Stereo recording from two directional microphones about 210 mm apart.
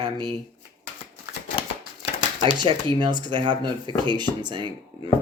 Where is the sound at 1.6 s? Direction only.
25° left (ahead or behind).